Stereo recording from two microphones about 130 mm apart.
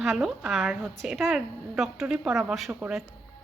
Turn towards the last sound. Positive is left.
turn(degrees=-5)  # may be behind; listen again after turning